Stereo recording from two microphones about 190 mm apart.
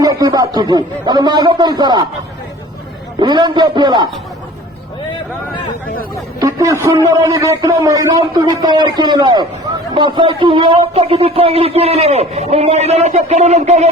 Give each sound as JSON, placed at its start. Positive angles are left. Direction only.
{"t": 0.0, "sound": "a man's voice", "side_deg": -20}
{"t": 3.2, "sound": "a man's voice", "side_deg": -20}
{"t": 6.4, "sound": "a man's voice", "side_deg": -15}